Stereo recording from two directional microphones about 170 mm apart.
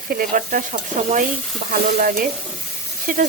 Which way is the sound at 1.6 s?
55° right (ahead or behind).